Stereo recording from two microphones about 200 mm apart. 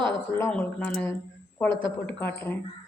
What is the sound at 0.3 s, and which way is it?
A woman's voice, 10° left (ahead or behind).